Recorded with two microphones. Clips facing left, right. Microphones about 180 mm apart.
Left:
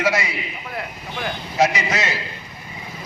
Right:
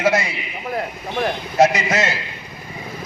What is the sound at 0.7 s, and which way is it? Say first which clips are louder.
A man's voice: right 7 dB; 40° right (ahead or behind).